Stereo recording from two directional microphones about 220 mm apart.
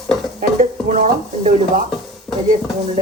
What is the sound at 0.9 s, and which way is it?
Speech, 35° right (ahead or behind).